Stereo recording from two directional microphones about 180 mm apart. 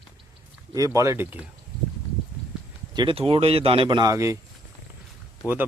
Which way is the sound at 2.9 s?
25° right (ahead or behind).